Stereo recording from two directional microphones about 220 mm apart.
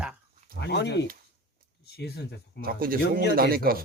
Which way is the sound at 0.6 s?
50° left (ahead or behind).